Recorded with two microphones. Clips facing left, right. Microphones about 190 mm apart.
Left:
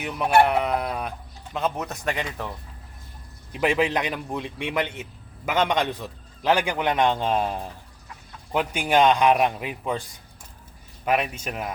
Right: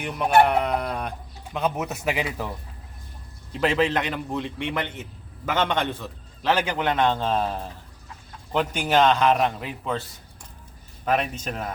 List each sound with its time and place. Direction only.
0.0 s speech: 5° left (ahead or behind)
3.6 s a man's voice: 15° left (ahead or behind)